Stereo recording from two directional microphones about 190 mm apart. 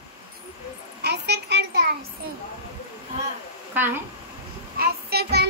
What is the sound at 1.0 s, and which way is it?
Child singing, 60° right (ahead or behind).